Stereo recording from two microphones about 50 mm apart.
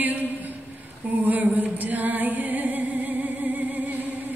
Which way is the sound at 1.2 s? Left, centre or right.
Right.